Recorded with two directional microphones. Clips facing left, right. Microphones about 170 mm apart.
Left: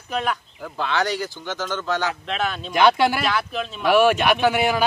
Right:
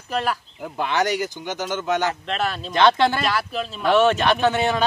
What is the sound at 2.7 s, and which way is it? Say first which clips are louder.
Speech: even; 10° left (ahead or behind).